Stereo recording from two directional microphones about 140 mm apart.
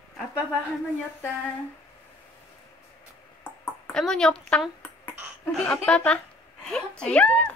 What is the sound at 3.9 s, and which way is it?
Speech, 5° left (ahead or behind).